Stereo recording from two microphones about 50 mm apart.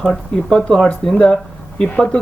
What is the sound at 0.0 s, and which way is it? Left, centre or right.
Speech, centre.